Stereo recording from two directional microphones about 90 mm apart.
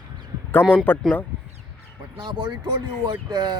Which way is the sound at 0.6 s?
10° right (ahead or behind).